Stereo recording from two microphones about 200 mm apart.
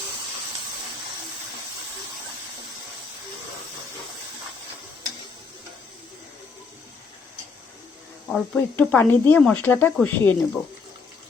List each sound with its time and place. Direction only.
8.3 s speech: 5° left (ahead or behind)